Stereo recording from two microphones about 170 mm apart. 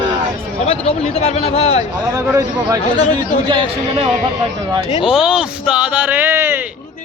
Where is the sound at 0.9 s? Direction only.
40° left (ahead or behind).